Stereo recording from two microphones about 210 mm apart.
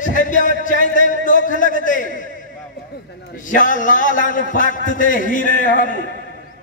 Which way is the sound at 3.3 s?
40° left (ahead or behind).